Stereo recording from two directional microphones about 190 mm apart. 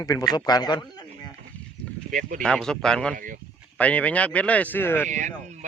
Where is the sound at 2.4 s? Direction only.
5° left (ahead or behind).